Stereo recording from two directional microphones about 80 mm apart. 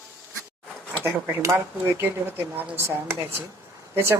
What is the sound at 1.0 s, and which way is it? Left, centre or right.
Speech, right.